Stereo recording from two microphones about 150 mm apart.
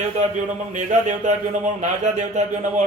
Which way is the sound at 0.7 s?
55° right (ahead or behind).